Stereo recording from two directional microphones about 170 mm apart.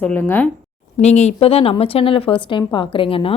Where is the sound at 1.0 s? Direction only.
40° left (ahead or behind).